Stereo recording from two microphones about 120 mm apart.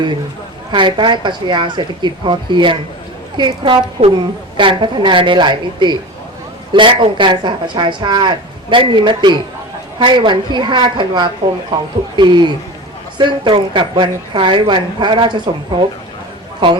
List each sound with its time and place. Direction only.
0.7 s a woman's voice: 40° right (ahead or behind)
16.6 s a woman's voice: 45° right (ahead or behind)